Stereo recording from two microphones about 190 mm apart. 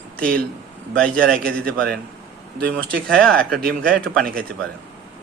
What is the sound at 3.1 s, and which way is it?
Speech, 5° left (ahead or behind).